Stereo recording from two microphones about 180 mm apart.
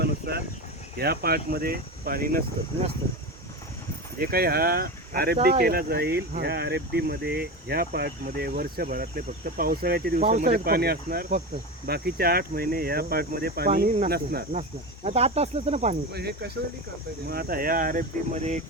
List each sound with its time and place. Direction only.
0.0 s speech: 65° right (ahead or behind)
4.2 s speech: 55° right (ahead or behind)
10.2 s speech: 40° right (ahead or behind)
10.5 s speech: 60° right (ahead or behind)
11.9 s speech: 60° right (ahead or behind)
15.0 s speech: 35° right (ahead or behind)
16.1 s speech: 65° right (ahead or behind); by 18.6 s 40° right (ahead or behind)